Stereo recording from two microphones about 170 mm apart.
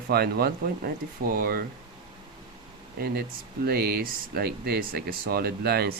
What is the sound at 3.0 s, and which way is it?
Speech, 65° right (ahead or behind).